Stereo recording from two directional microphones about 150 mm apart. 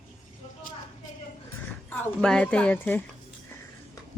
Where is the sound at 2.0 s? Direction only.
5° left (ahead or behind).